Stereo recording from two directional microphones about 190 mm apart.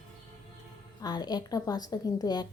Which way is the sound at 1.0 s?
20° left (ahead or behind).